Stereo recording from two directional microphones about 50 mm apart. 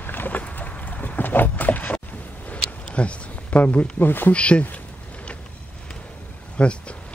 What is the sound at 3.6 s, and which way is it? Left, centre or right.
Speech, left.